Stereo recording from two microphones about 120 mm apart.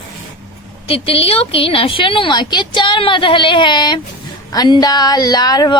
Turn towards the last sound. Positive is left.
turn(degrees=35)  # may be behind; listen again after turning